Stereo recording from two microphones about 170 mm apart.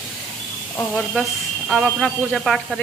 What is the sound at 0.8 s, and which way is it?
Speech, 5° left (ahead or behind).